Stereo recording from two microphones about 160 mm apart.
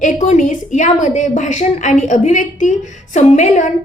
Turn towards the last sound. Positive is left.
turn(degrees=50)  # may be behind; listen again after turning